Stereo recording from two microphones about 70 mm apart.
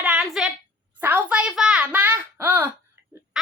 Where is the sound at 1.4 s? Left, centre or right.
Centre.